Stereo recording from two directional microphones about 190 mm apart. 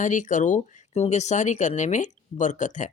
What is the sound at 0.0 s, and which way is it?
Speech, 40° left (ahead or behind).